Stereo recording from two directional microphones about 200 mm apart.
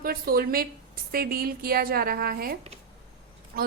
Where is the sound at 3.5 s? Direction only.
45° right (ahead or behind).